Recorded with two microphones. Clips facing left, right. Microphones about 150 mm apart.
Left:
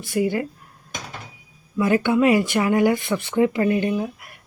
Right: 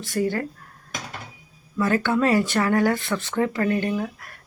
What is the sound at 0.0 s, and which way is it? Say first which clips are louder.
Speech: left 2 dB; 15° left (ahead or behind).